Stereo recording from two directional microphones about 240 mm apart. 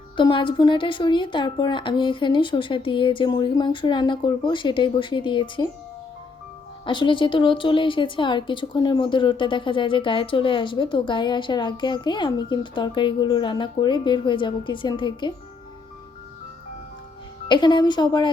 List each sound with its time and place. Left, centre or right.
0.2 s a woman's voice: left
6.8 s a woman's voice: centre
17.5 s a woman's voice: centre